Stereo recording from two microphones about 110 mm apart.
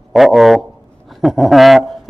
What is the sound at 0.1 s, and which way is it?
A man's voice, centre (ahead or behind).